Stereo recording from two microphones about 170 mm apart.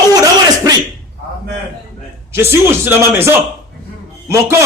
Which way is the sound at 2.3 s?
15° right (ahead or behind).